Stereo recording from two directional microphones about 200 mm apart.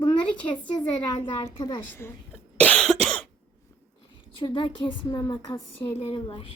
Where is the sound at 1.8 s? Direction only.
10° left (ahead or behind).